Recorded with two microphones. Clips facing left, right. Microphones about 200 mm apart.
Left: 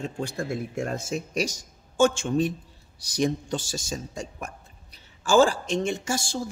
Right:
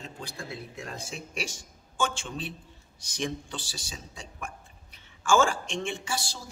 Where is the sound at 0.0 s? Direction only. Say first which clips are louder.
Left 10 dB; 45° left (ahead or behind).